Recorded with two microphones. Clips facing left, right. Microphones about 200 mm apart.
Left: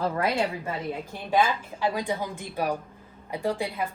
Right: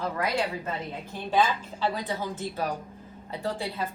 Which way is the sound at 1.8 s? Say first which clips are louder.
Left 2 dB; 15° left (ahead or behind).